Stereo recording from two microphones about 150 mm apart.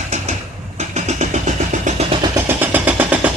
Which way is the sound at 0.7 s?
50° right (ahead or behind).